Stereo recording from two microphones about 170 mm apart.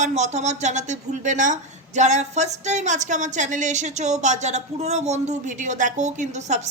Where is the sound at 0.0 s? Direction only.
40° right (ahead or behind).